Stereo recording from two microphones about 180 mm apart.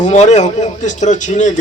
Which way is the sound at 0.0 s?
40° left (ahead or behind).